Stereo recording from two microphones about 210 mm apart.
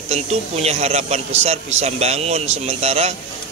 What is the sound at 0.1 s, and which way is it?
A man's voice, 30° right (ahead or behind).